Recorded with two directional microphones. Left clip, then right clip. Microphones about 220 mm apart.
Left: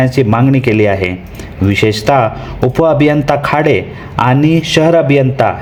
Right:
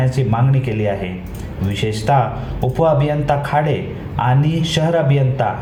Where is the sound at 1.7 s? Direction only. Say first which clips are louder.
Left 7 dB; 50° left (ahead or behind).